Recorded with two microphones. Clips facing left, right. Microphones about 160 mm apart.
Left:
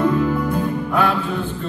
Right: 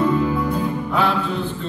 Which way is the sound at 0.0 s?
50° left (ahead or behind).